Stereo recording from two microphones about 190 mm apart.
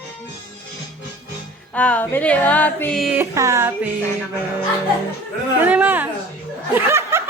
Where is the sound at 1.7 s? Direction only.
5° left (ahead or behind).